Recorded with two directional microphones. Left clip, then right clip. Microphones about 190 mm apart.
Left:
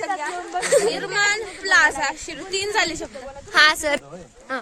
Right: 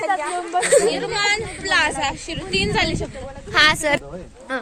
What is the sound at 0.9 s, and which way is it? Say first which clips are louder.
A woman's voice: right 1 dB; 50° left (ahead or behind).